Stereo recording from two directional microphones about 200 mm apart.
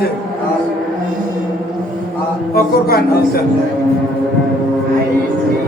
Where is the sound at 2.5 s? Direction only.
50° left (ahead or behind).